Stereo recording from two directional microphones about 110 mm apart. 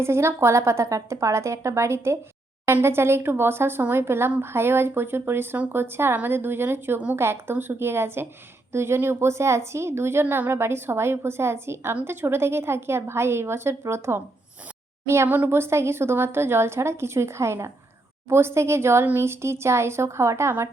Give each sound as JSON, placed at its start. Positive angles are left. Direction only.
{"t": 0.0, "sound": "speech", "side_deg": -25}